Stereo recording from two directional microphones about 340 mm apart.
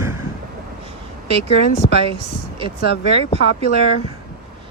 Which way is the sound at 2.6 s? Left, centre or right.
Centre.